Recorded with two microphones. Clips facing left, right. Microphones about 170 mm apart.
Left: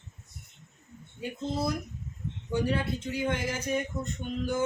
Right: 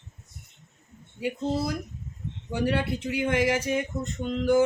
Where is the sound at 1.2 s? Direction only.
85° right.